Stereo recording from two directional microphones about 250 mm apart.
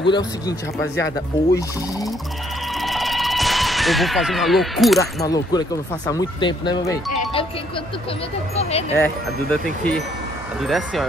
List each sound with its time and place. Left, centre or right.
0.0 s speech: centre
2.8 s a sound: centre
5.2 s speech: centre
8.5 s speech: left
9.0 s speech: centre